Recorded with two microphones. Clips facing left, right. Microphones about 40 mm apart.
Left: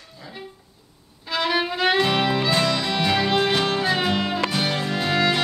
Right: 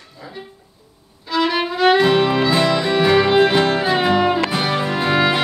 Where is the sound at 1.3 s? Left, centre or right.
Centre.